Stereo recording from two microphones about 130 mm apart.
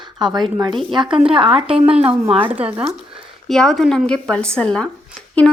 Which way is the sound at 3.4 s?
Centre (ahead or behind).